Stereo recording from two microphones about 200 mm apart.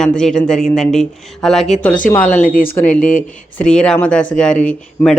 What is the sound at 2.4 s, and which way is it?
Speech, 45° left (ahead or behind).